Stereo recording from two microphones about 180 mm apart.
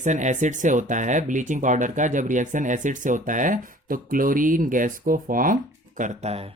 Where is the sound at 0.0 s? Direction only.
40° right (ahead or behind).